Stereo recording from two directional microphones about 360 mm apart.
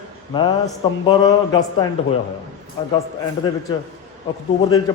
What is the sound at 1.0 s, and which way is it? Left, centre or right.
Speech, centre.